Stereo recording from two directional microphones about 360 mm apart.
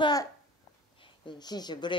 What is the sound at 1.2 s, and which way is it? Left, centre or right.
Speech, centre.